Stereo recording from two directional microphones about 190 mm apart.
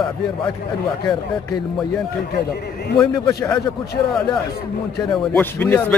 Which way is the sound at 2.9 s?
15° left (ahead or behind).